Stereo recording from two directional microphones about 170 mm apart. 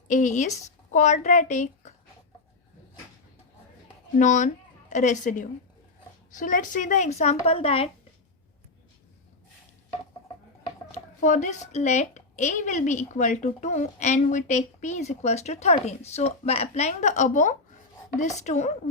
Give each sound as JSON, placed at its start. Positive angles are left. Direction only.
{"t": 0.1, "sound": "speech", "side_deg": 45}
{"t": 4.2, "sound": "a woman's voice", "side_deg": 45}
{"t": 10.9, "sound": "speech", "side_deg": 45}